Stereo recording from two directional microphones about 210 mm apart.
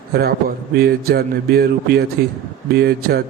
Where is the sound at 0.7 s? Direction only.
45° right (ahead or behind).